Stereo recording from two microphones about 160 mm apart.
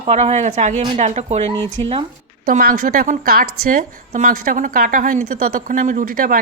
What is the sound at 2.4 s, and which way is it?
A woman's voice, 60° right (ahead or behind).